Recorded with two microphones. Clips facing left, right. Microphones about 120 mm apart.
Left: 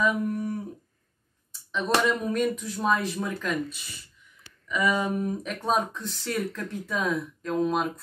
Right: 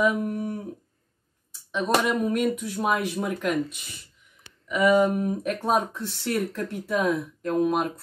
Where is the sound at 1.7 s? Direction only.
15° right (ahead or behind).